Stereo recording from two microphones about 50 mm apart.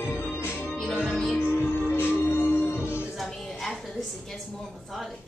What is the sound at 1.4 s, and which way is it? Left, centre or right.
Music, left.